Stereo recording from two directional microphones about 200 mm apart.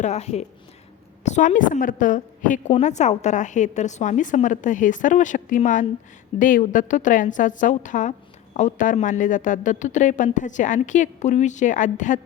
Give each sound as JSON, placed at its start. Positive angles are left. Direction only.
{"t": 0.0, "sound": "speech", "side_deg": 35}